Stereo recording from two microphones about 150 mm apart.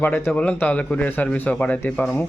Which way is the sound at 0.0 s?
10° left (ahead or behind).